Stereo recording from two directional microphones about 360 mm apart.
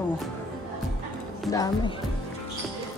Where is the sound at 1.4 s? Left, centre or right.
Centre.